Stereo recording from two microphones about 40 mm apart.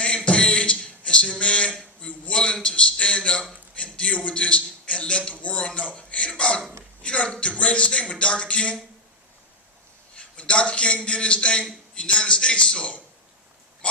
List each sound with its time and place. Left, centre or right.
0.3 s beatboxing: left
2.0 s a sound: left
3.9 s a man's voice: left
5.3 s a man's voice: left
10.2 s a man's voice: left